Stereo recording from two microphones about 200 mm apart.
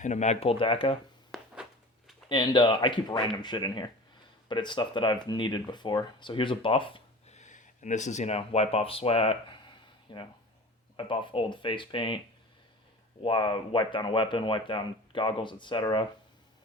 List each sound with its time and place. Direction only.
0.0 s speech: 35° left (ahead or behind)
2.3 s speech: 20° left (ahead or behind)
13.2 s speech: 25° left (ahead or behind)